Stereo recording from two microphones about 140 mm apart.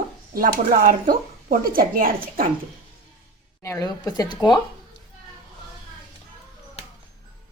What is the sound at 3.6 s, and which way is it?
A woman's voice, 20° left (ahead or behind).